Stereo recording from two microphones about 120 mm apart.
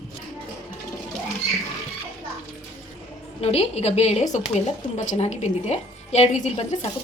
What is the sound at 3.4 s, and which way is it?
A woman's voice, 60° left (ahead or behind).